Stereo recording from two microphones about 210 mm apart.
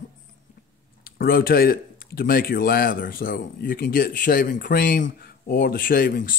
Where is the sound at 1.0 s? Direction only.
45° left (ahead or behind).